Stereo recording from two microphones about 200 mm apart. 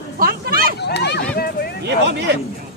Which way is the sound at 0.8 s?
55° left (ahead or behind).